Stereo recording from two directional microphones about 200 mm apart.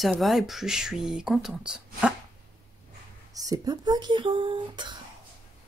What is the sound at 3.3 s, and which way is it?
Speech, 20° right (ahead or behind).